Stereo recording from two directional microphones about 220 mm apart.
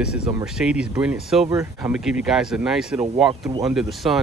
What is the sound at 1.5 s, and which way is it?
Speech, 15° right (ahead or behind).